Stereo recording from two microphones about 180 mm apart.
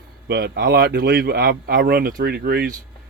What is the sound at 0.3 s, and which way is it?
Speech, 65° right (ahead or behind).